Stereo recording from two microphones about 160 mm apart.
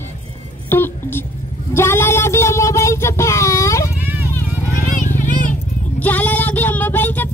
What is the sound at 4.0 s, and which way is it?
Vehicle, 10° right (ahead or behind).